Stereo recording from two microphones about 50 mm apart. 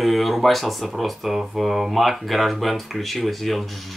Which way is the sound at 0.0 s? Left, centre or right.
Centre.